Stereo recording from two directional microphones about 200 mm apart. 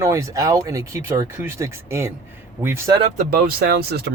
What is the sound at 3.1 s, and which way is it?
Speech, 45° right (ahead or behind).